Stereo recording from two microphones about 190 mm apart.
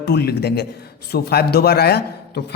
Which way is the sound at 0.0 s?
60° left (ahead or behind).